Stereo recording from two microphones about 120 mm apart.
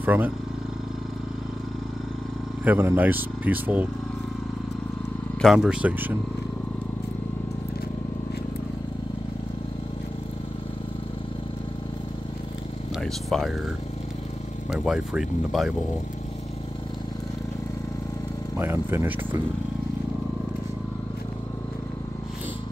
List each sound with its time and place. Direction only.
0.0 s speech: 15° right (ahead or behind)
2.6 s speech: 20° right (ahead or behind)
5.4 s speech: 5° right (ahead or behind)
13.0 s speech: centre (ahead or behind)
14.7 s speech: 5° right (ahead or behind)
18.6 s speech: 20° right (ahead or behind)